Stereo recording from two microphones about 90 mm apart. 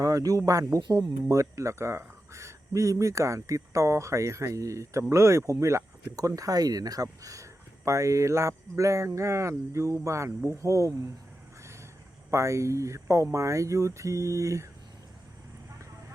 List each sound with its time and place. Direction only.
0.0 s speech: 40° right (ahead or behind)
11.6 s vehicle: 30° right (ahead or behind)
12.3 s speech: 35° right (ahead or behind)